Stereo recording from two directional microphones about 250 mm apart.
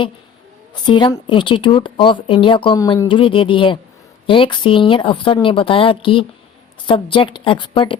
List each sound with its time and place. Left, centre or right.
0.7 s speech: centre